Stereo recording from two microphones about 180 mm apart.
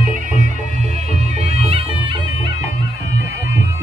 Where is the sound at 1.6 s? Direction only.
35° right (ahead or behind).